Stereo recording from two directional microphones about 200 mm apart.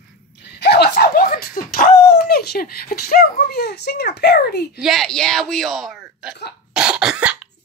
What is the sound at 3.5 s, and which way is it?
Speech, 50° left (ahead or behind).